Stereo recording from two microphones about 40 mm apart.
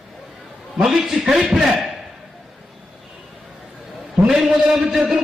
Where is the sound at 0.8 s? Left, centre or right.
Centre.